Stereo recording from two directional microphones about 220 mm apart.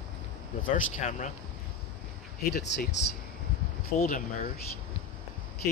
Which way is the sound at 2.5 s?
50° left (ahead or behind).